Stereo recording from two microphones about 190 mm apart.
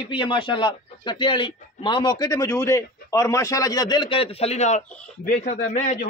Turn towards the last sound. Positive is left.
turn(degrees=40)  # may be behind; listen again after turning